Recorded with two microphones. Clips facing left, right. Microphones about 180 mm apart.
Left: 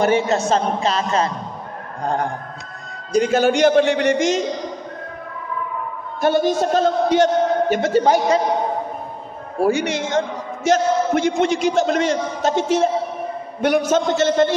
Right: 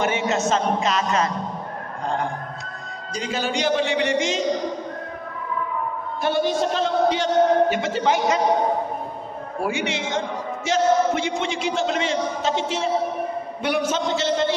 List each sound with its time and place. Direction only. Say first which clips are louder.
0.0 s a man's voice: left 5 dB; 35° left (ahead or behind)
3.1 s a man's voice: left 10 dB; 50° left (ahead or behind)
6.2 s a man's voice: left 4 dB; 45° left (ahead or behind)
9.6 s a man's voice: left 7 dB; 40° left (ahead or behind)